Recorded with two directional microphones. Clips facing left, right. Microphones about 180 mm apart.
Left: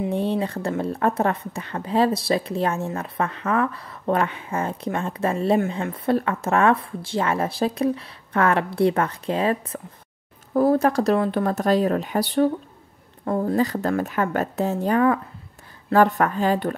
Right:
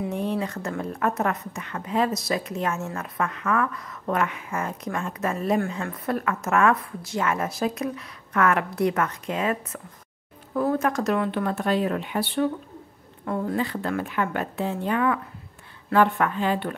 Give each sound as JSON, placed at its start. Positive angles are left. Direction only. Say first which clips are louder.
{"t": 0.0, "sound": "speech", "louder": "left 4 dB", "side_deg": 30}